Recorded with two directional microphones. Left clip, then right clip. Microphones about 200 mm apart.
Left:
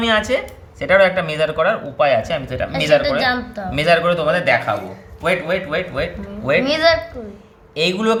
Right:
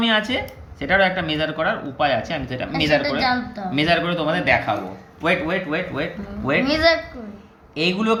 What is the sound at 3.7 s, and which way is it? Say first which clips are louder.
A man's voice: left 5 dB; 65° left (ahead or behind).